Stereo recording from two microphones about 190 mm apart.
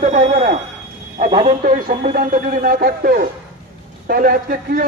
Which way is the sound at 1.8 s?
45° right (ahead or behind).